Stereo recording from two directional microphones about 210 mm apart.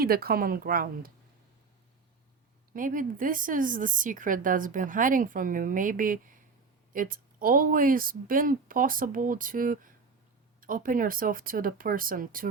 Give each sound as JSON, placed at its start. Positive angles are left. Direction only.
{"t": 0.0, "sound": "speech", "side_deg": -45}
{"t": 2.7, "sound": "a woman's voice", "side_deg": -40}